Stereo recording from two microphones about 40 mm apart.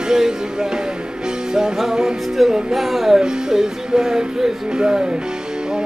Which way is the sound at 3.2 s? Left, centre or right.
Centre.